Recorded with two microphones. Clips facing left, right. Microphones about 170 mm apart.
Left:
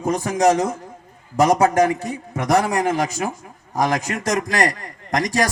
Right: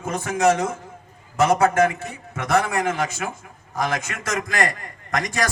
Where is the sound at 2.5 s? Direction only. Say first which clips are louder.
Left 3 dB; 35° left (ahead or behind).